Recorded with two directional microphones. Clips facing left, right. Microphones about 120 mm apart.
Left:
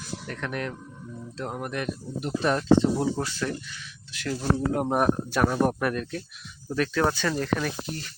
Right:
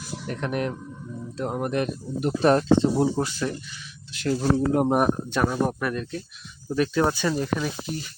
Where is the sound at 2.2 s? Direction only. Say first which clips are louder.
Right 6 dB; 45° right (ahead or behind).